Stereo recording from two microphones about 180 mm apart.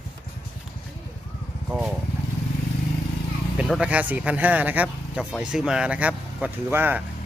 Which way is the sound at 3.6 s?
5° right (ahead or behind).